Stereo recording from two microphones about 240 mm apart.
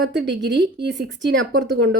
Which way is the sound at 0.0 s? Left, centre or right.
Right.